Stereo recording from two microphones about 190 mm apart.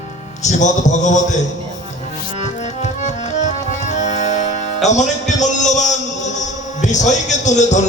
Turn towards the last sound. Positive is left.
turn(degrees=40)  # may be behind; listen again after turning